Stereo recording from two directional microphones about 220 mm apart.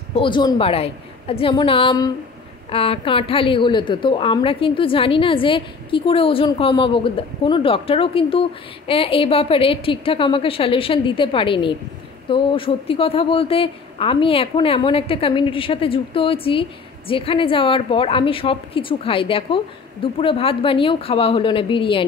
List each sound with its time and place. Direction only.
0.1 s a woman's voice: 20° left (ahead or behind)